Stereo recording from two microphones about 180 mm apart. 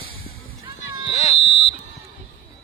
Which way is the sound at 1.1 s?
40° left (ahead or behind).